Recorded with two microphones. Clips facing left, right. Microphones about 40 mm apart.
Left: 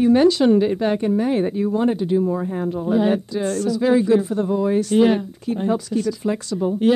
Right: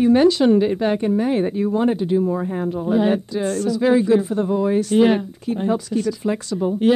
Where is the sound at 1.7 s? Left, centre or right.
Right.